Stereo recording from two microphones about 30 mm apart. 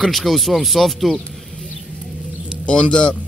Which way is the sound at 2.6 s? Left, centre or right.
Left.